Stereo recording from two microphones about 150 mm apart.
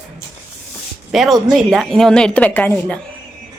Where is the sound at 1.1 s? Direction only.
Centre (ahead or behind).